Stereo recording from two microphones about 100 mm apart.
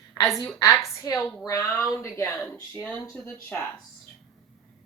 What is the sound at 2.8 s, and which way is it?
Speech, 15° left (ahead or behind).